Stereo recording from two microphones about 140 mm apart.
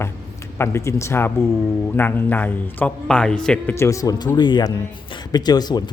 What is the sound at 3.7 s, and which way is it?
A man's voice, 20° left (ahead or behind).